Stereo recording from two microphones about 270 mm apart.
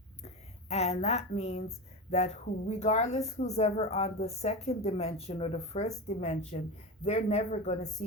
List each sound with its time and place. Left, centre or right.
0.7 s speech: left